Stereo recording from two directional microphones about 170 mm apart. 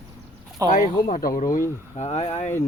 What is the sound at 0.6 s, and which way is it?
Speech, 20° right (ahead or behind).